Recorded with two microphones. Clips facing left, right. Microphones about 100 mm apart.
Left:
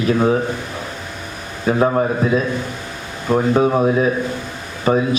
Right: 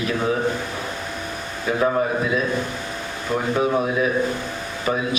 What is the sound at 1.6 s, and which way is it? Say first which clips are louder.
A man's voice: left 4 dB; 35° left (ahead or behind).